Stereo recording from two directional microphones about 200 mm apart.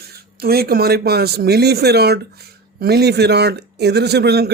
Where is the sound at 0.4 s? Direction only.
50° right (ahead or behind).